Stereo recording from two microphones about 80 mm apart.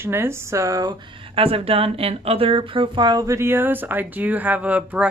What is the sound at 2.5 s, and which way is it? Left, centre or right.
Speech, right.